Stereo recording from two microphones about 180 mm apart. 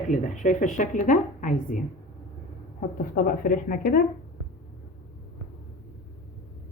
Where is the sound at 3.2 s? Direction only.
50° left (ahead or behind).